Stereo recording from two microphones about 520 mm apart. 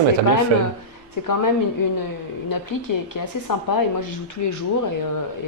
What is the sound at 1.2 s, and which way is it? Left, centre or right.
Speech, left.